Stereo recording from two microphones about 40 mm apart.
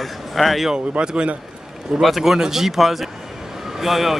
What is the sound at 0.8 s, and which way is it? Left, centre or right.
Speech, right.